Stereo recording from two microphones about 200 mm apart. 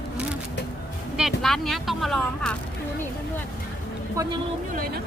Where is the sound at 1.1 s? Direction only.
Centre (ahead or behind).